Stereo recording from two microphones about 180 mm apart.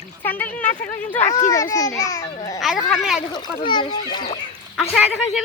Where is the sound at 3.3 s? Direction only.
25° left (ahead or behind).